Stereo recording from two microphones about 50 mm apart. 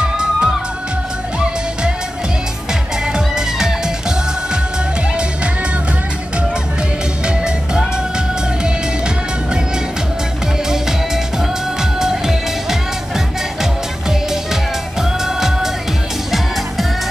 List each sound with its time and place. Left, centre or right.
0.0 s music: centre
3.1 s music: centre
7.2 s music: centre
10.7 s music: centre